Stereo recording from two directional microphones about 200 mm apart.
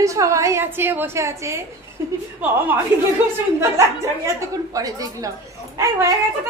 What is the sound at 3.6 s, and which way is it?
A woman's voice, 15° right (ahead or behind).